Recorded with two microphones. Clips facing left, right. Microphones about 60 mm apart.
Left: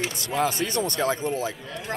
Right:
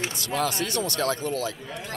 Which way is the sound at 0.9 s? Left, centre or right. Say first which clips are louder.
Left 1 dB; left.